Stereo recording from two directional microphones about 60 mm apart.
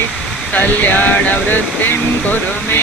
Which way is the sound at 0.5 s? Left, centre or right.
Left.